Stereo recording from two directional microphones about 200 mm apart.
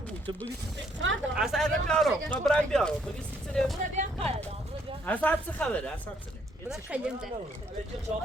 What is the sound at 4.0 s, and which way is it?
Speech, 40° right (ahead or behind).